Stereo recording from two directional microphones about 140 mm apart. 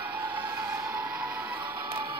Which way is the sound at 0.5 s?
15° right (ahead or behind).